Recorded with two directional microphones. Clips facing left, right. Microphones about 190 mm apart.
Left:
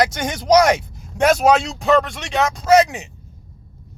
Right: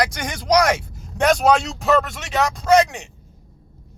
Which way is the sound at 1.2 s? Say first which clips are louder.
Left 2 dB; 5° left (ahead or behind).